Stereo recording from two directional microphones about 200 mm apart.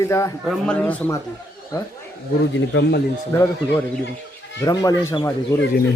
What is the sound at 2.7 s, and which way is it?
Speech, 60° left (ahead or behind).